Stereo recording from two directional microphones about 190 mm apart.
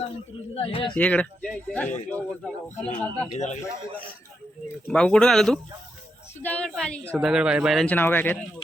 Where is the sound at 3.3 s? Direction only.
40° left (ahead or behind).